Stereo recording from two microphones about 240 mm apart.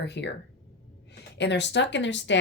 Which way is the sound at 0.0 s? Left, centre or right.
Left.